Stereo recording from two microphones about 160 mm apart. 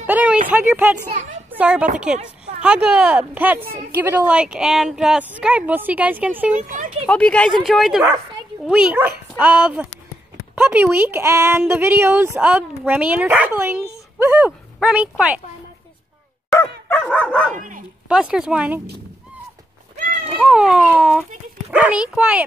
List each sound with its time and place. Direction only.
0.0 s speech: 10° right (ahead or behind)
1.1 s speech: 50° right (ahead or behind)
1.5 s a woman's voice: 10° right (ahead or behind)
6.5 s speech: 55° right (ahead or behind)
7.1 s speech: 5° left (ahead or behind)
16.5 s dog: 10° left (ahead or behind)
17.6 s speech: 55° right (ahead or behind)
18.0 s speech: 5° right (ahead or behind)
20.3 s speech: 5° right (ahead or behind)